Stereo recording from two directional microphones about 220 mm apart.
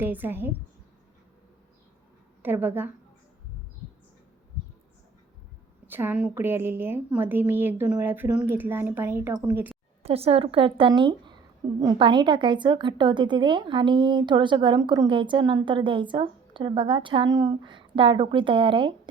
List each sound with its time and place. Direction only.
0.0 s a woman's voice: 10° right (ahead or behind)
2.4 s a woman's voice: 10° right (ahead or behind)
5.9 s a woman's voice: 10° right (ahead or behind)
10.0 s a woman's voice: 25° right (ahead or behind)